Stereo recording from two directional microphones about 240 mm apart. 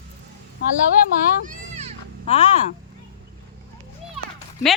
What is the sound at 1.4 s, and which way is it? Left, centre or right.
Children playing, right.